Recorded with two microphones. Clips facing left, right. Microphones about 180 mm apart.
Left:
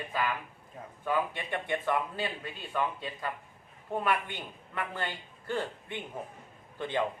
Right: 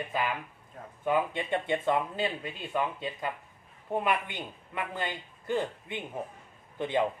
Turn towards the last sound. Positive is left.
turn(degrees=-20)  # may be behind; listen again after turning